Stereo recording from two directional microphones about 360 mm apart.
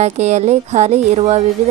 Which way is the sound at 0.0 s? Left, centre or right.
Centre.